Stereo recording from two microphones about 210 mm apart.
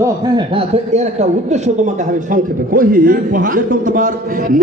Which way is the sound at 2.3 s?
40° right (ahead or behind).